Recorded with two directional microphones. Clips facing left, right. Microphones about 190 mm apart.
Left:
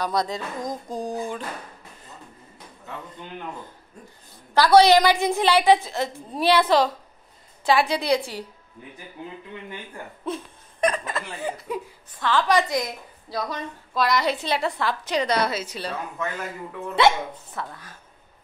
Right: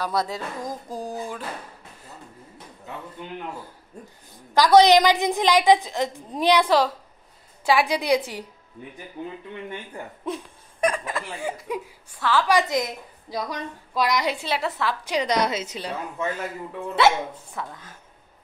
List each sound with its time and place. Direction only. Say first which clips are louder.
0.0 s a woman's voice: left 1 dB; 5° right (ahead or behind)
4.6 s a woman's voice: even; 15° right (ahead or behind)
7.6 s a woman's voice: even; 10° right (ahead or behind)
9.7 s a woman's voice: right 2 dB; 15° right (ahead or behind)
12.6 s a woman's voice: right 1 dB; 20° right (ahead or behind)
16.9 s a woman's voice: even; 5° right (ahead or behind)